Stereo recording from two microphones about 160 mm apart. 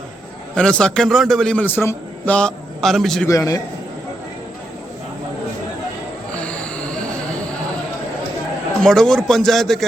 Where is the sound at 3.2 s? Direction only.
20° left (ahead or behind).